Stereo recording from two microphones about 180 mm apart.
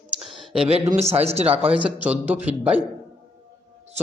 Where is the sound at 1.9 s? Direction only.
10° right (ahead or behind).